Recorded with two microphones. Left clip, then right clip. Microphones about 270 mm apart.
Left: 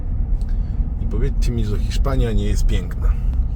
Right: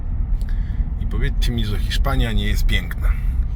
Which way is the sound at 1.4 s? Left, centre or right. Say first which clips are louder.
Right 1 dB; centre.